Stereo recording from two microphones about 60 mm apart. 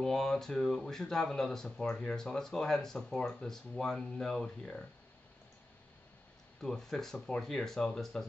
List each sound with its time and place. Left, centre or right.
0.0 s speech: centre
6.6 s speech: centre